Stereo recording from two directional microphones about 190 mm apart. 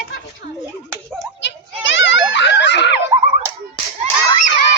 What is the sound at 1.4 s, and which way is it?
Children playing, 70° left (ahead or behind).